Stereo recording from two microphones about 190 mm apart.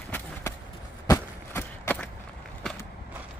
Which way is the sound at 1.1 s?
10° left (ahead or behind).